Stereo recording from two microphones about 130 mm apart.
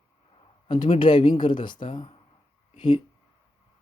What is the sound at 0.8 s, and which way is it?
Speech, 45° left (ahead or behind).